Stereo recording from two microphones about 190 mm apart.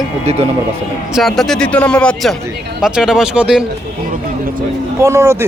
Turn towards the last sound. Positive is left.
turn(degrees=-15)  # may be behind; listen again after turning